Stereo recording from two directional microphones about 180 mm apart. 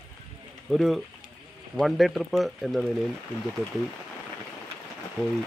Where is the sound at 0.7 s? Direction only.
Centre (ahead or behind).